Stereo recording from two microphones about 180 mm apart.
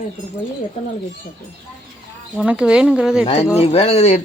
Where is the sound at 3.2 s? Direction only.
35° left (ahead or behind).